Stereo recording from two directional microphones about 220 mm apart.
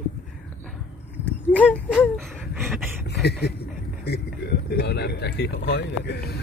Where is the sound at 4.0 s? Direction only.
45° left (ahead or behind).